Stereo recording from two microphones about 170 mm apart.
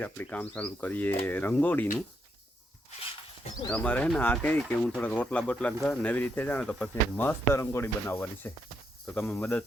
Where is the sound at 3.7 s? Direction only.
10° left (ahead or behind).